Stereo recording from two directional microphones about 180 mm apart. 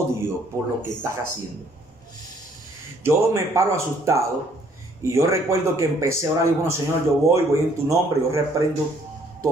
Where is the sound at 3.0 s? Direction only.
15° right (ahead or behind).